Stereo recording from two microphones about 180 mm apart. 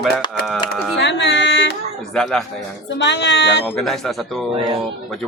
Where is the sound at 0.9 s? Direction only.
75° left (ahead or behind).